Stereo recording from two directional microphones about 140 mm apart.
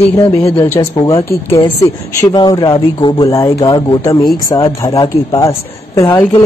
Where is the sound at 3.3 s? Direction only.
25° left (ahead or behind).